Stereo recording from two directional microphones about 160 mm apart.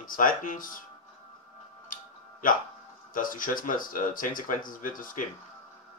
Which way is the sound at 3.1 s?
60° left (ahead or behind).